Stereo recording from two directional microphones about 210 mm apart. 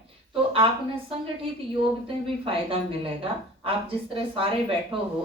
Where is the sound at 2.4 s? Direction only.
25° right (ahead or behind).